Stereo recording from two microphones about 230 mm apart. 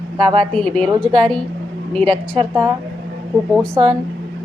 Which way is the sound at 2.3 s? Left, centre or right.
Right.